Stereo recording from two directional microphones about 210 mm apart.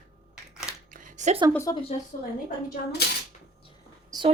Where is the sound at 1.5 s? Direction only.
15° left (ahead or behind).